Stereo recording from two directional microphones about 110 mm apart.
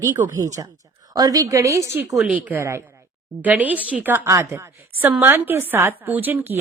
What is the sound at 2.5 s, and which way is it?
A woman's voice, 25° right (ahead or behind).